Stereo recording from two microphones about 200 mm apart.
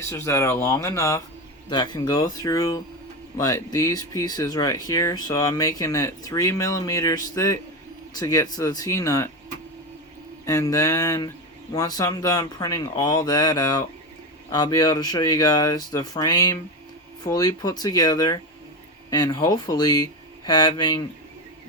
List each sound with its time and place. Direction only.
0.0 s speech: 15° left (ahead or behind)
10.4 s speech: 15° left (ahead or behind)